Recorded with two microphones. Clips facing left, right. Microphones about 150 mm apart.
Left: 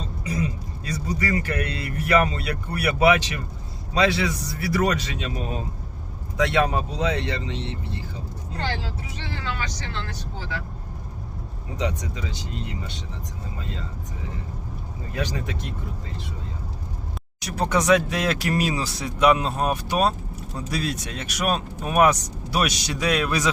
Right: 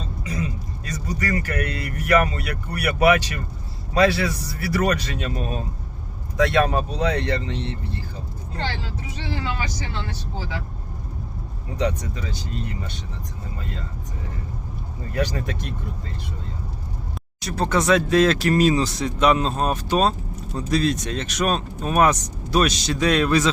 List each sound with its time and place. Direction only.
1.2 s speech: 25° left (ahead or behind)
9.3 s speech: 15° right (ahead or behind)
11.8 s speech: 20° left (ahead or behind)
15.1 s speech: 20° left (ahead or behind)
17.4 s speech: 15° left (ahead or behind)